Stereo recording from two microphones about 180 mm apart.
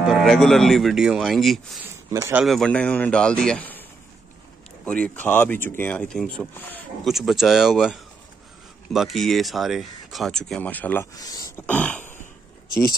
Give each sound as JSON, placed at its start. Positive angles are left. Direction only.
{"t": 0.0, "sound": "speech", "side_deg": 0}
{"t": 1.9, "sound": "speech", "side_deg": -15}
{"t": 2.4, "sound": "speech", "side_deg": 0}
{"t": 4.8, "sound": "speech", "side_deg": 5}
{"t": 11.1, "sound": "speech", "side_deg": 20}
{"t": 11.6, "sound": "a sound", "side_deg": 10}